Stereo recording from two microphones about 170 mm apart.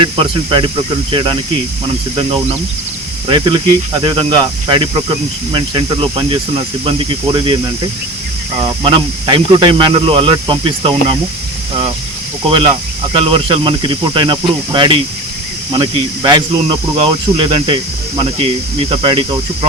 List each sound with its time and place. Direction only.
0.0 s speech: 30° right (ahead or behind)
3.2 s speech: 30° right (ahead or behind)
8.6 s speech: 30° right (ahead or behind)
12.5 s speech: 30° right (ahead or behind)